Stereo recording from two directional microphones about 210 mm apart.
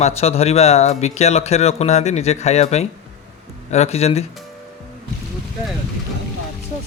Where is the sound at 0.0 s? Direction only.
30° left (ahead or behind).